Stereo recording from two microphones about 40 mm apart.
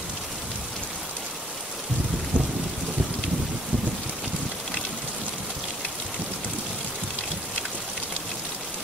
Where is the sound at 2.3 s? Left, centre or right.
Right.